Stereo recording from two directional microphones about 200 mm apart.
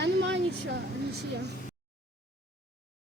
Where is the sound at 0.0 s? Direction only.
65° right (ahead or behind).